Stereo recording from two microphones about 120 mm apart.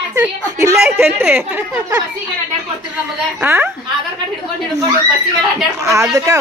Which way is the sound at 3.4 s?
20° right (ahead or behind).